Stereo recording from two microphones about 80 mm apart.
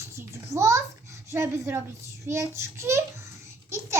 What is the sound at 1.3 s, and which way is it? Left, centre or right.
A child's voice, right.